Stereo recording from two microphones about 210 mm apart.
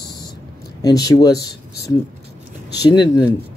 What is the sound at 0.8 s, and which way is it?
Speech, 20° left (ahead or behind).